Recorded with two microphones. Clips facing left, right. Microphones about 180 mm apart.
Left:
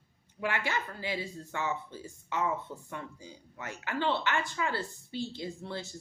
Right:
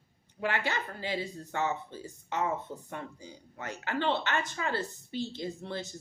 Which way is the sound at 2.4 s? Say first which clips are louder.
Even; 45° right (ahead or behind).